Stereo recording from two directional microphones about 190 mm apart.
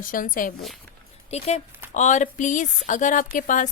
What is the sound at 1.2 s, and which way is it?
A woman's voice, 35° left (ahead or behind).